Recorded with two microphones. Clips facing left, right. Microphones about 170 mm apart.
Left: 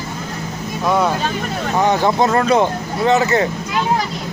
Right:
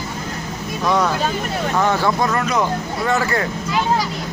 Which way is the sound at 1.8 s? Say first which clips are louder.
Left 4 dB; 20° left (ahead or behind).